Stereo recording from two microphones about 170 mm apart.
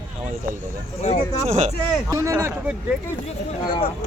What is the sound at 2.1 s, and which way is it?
Speech, 20° right (ahead or behind).